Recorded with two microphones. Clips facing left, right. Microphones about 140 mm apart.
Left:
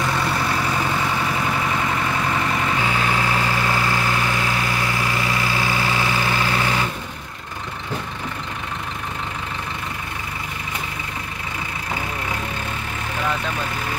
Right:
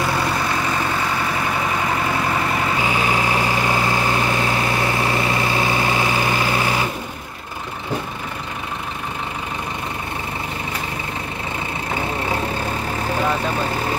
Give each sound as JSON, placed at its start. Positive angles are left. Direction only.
{"t": 2.8, "sound": "vehicle", "side_deg": -15}
{"t": 13.0, "sound": "vehicle", "side_deg": -30}